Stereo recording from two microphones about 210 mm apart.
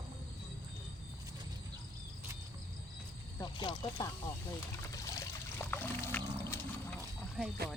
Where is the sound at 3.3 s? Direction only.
20° left (ahead or behind).